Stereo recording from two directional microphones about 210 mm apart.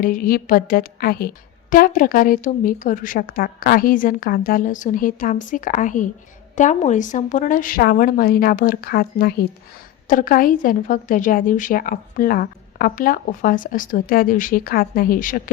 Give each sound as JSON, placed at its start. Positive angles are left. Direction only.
{"t": 0.0, "sound": "a woman's voice", "side_deg": 40}